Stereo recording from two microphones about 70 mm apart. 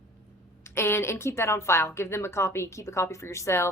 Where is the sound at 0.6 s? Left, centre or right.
Left.